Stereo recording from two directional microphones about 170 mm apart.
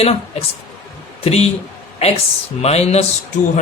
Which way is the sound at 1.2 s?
35° left (ahead or behind).